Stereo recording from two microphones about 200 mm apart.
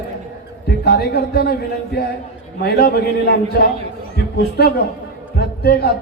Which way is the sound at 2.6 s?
55° left (ahead or behind).